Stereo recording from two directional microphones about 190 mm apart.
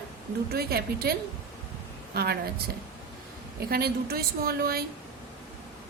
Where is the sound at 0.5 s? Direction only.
55° right (ahead or behind).